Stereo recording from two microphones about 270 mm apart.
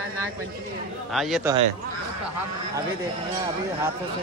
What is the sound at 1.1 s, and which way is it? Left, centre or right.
Speech, centre.